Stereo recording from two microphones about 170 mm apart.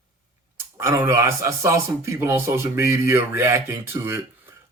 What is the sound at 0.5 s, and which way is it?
A man's voice, 15° right (ahead or behind).